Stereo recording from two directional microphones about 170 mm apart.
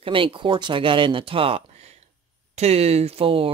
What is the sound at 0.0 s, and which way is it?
Speech, 30° right (ahead or behind).